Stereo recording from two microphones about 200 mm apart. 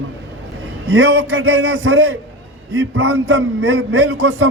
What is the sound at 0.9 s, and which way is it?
A man's voice, 90° right.